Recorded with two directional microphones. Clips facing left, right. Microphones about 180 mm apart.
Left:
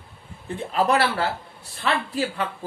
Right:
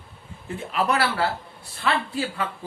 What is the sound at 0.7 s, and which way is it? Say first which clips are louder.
Speech: left 3 dB; 30° left (ahead or behind).